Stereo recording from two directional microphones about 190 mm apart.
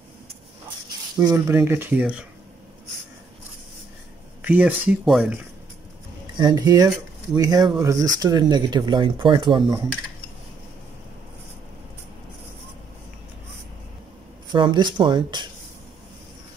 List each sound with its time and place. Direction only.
1.1 s speech: 15° right (ahead or behind)
4.4 s speech: 10° right (ahead or behind)
6.3 s speech: 20° right (ahead or behind)
14.5 s speech: 25° right (ahead or behind)